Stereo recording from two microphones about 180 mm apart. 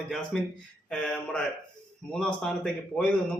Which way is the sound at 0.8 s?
5° left (ahead or behind).